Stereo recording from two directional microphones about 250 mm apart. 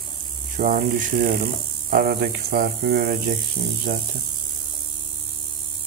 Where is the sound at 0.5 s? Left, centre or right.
Right.